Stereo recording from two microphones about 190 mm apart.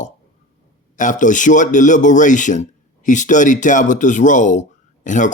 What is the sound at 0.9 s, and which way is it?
Speech, 40° left (ahead or behind).